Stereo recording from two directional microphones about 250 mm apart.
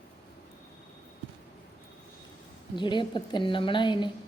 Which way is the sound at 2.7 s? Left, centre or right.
Centre.